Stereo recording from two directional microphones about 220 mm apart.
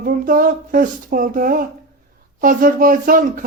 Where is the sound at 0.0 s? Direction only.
40° right (ahead or behind).